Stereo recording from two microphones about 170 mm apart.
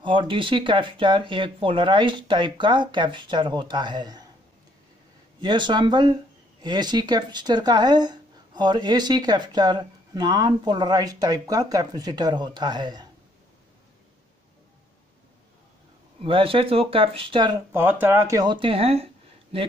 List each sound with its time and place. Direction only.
0.0 s speech: 30° right (ahead or behind)
5.4 s speech: 25° right (ahead or behind)
16.2 s speech: 30° right (ahead or behind)
17.7 s speech: 10° right (ahead or behind); by 19.0 s 35° right (ahead or behind)